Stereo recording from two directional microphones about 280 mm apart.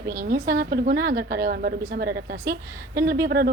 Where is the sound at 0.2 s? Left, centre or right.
Right.